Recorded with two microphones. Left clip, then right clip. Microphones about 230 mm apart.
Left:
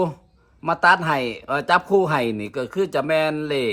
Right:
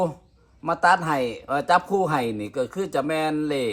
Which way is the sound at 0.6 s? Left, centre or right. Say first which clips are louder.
Left 3 dB; left.